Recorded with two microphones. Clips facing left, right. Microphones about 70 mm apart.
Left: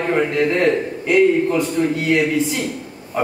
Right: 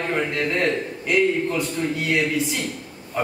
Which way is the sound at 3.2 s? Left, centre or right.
Centre.